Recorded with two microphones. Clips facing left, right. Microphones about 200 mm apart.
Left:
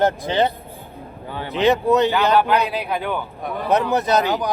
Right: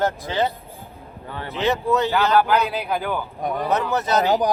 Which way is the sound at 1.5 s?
15° left (ahead or behind).